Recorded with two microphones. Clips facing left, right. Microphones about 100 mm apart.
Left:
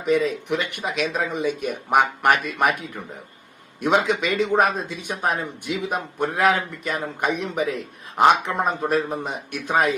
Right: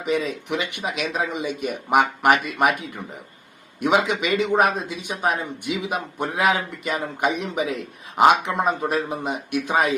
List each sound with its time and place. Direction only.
0.0 s speech: 5° right (ahead or behind)
0.5 s a man's voice: 15° right (ahead or behind)